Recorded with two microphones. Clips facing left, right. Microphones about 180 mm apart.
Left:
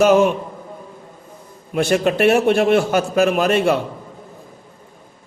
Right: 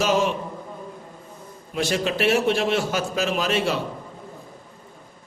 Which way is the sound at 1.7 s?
55° left (ahead or behind).